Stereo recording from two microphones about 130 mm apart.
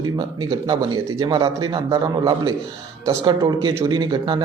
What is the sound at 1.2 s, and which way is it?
A man's voice, 35° right (ahead or behind).